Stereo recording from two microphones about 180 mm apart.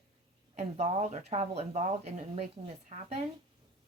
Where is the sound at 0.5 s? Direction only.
40° right (ahead or behind).